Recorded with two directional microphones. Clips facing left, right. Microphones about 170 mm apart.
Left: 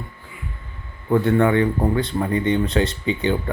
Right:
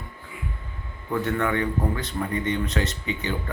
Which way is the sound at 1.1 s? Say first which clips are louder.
Left 8 dB; 30° left (ahead or behind).